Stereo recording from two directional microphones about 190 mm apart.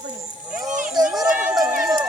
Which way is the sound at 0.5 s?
40° right (ahead or behind).